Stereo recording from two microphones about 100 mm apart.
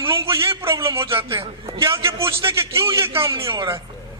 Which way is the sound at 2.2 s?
30° right (ahead or behind).